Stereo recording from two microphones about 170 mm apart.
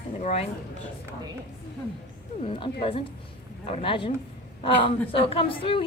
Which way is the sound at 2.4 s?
30° left (ahead or behind).